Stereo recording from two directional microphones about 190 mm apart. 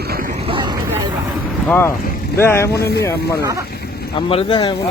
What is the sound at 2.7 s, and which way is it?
Speech, 60° left (ahead or behind).